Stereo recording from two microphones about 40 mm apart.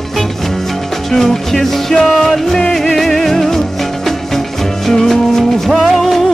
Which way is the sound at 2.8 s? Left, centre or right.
Centre.